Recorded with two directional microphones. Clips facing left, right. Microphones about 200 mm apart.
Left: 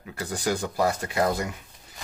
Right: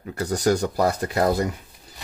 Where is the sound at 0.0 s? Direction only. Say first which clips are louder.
Right 7 dB; 40° right (ahead or behind).